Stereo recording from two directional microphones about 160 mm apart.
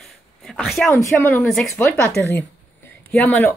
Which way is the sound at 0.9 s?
15° left (ahead or behind).